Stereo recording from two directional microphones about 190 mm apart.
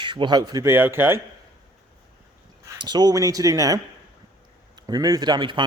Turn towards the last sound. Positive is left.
turn(degrees=-25)  # may be behind; listen again after turning